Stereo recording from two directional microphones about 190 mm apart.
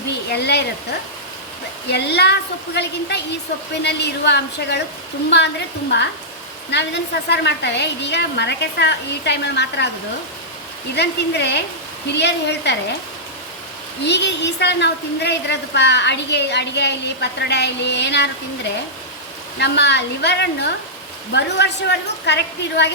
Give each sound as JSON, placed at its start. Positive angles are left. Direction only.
{"t": 0.3, "sound": "a woman's voice", "side_deg": 60}
{"t": 1.9, "sound": "a woman's voice", "side_deg": 60}
{"t": 10.9, "sound": "a woman's voice", "side_deg": 60}
{"t": 14.0, "sound": "a woman's voice", "side_deg": 65}
{"t": 19.5, "sound": "a woman's voice", "side_deg": 65}